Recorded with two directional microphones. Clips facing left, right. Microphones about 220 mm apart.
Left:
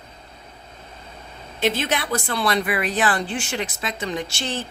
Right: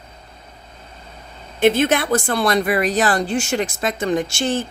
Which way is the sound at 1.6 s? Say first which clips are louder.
Right 7 dB; 55° right (ahead or behind).